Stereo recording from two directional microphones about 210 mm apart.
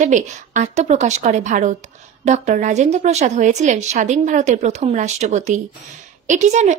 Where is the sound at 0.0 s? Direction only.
35° right (ahead or behind).